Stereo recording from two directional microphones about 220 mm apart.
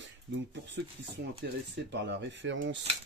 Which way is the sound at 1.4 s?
50° right (ahead or behind).